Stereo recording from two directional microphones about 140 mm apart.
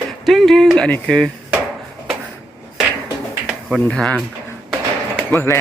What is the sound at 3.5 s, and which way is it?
Speech, 5° right (ahead or behind).